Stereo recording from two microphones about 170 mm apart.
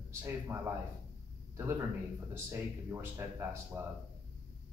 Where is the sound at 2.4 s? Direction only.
15° right (ahead or behind).